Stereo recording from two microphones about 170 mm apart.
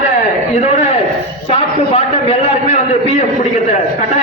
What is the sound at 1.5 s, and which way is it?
A man's voice, 35° left (ahead or behind).